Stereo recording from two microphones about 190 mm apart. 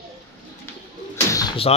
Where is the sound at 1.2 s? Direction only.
20° left (ahead or behind).